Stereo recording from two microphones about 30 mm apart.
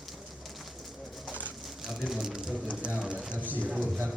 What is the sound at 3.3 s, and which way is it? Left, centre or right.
Speech, right.